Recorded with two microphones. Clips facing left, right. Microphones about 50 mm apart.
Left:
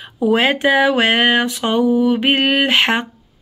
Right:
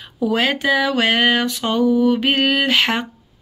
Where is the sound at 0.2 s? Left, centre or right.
Centre.